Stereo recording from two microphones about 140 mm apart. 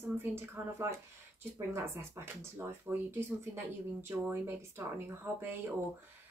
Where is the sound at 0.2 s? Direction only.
20° right (ahead or behind).